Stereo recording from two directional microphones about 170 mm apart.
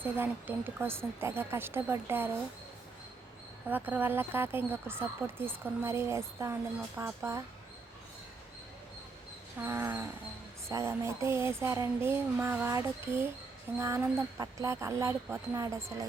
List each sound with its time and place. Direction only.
0.0 s speech: 10° right (ahead or behind)
3.7 s speech: 10° right (ahead or behind)
9.6 s speech: 15° right (ahead or behind)